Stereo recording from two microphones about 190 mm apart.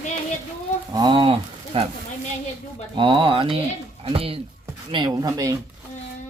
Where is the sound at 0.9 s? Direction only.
25° right (ahead or behind).